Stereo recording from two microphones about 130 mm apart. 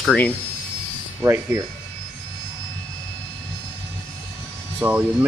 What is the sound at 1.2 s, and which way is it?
Speech, 20° right (ahead or behind).